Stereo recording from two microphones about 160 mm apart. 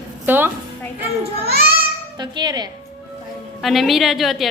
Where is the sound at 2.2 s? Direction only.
25° right (ahead or behind).